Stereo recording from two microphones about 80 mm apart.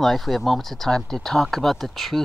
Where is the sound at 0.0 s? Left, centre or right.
Centre.